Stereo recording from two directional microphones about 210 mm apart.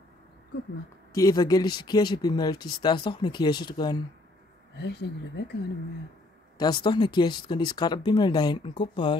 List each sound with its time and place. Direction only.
1.1 s speech: 15° left (ahead or behind)
4.7 s speech: 50° left (ahead or behind)
6.6 s speech: 20° left (ahead or behind)